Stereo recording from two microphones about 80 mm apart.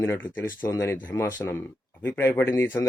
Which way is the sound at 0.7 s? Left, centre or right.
Left.